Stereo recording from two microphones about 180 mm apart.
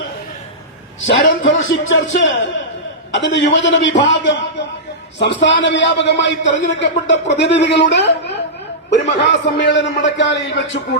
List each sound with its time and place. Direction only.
1.0 s a man's voice: 90° left